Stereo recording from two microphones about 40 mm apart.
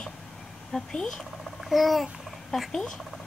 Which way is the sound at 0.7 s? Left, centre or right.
Centre.